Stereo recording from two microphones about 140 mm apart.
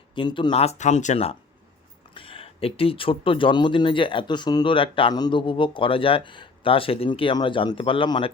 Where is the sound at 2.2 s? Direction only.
40° left (ahead or behind).